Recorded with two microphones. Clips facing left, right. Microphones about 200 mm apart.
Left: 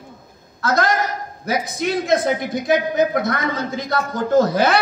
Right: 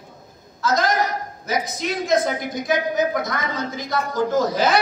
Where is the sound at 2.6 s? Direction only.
55° left (ahead or behind).